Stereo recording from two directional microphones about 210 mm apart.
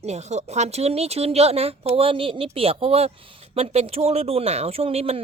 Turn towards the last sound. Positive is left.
turn(degrees=-30)  # may be behind; listen again after turning